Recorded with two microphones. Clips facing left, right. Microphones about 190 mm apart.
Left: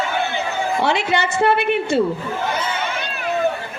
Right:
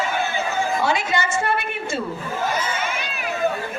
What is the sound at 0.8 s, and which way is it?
A woman's voice, 65° left (ahead or behind).